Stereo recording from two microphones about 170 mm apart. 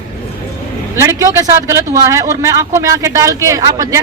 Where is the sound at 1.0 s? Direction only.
20° right (ahead or behind).